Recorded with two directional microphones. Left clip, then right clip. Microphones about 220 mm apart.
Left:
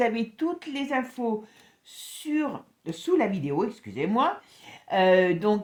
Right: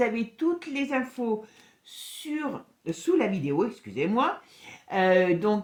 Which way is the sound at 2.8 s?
35° left (ahead or behind).